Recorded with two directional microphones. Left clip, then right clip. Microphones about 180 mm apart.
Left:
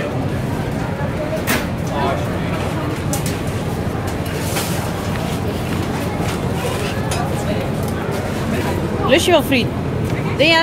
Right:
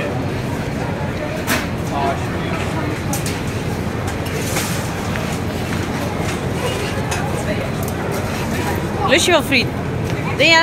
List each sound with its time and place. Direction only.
9.1 s speech: 20° left (ahead or behind)